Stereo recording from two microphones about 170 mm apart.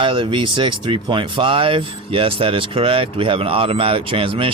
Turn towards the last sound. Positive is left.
turn(degrees=-30)  # may be behind; listen again after turning